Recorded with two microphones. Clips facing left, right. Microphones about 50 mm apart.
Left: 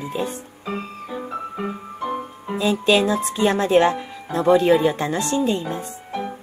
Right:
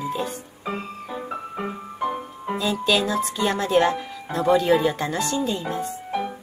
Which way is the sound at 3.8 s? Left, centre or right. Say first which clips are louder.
Left 3 dB; centre.